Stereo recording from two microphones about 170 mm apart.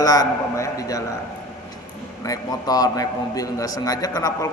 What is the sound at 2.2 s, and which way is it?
A man's voice, 20° left (ahead or behind).